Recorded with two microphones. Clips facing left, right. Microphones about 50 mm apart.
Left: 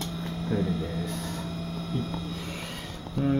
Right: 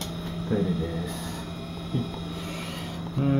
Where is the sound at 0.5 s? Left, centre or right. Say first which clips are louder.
Right 2 dB; centre.